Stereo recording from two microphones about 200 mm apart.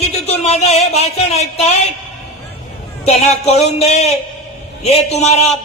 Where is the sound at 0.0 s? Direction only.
30° left (ahead or behind).